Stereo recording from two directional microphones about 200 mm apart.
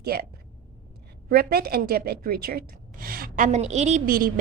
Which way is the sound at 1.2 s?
50° right (ahead or behind).